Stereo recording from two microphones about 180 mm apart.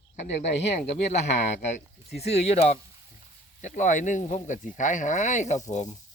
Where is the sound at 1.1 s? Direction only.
40° left (ahead or behind).